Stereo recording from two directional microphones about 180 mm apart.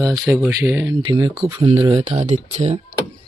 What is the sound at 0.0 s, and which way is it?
Speech, 20° right (ahead or behind).